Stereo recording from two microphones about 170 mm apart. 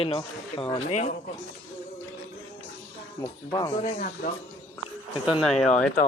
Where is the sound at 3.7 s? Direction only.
50° left (ahead or behind).